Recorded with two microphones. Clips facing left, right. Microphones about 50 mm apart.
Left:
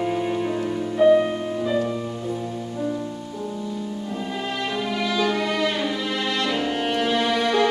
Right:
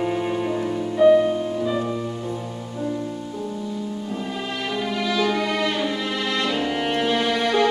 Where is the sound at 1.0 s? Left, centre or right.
Left.